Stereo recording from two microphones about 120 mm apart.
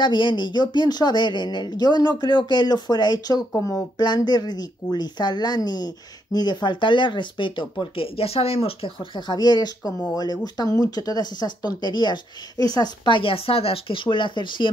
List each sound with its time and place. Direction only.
0.0 s speech: 40° left (ahead or behind)